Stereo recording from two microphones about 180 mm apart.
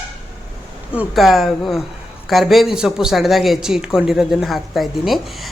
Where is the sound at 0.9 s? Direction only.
5° right (ahead or behind).